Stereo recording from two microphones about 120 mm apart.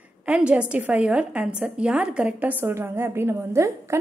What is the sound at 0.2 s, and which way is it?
A woman's voice, 10° right (ahead or behind).